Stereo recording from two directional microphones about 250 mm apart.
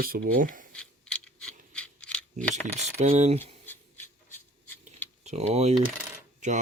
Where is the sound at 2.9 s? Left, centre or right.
Right.